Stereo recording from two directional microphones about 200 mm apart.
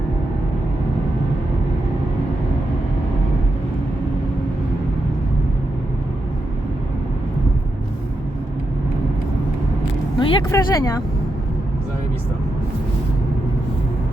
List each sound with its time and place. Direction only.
10.2 s speech: 15° left (ahead or behind)